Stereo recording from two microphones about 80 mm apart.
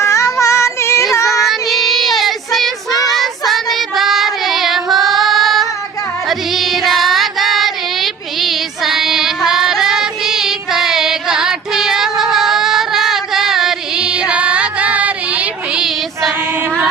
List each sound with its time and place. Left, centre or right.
0.0 s child singing: left
1.3 s child singing: centre
2.9 s child singing: left
3.2 s child singing: centre